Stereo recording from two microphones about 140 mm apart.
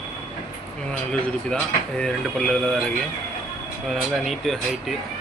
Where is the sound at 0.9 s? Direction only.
5° left (ahead or behind).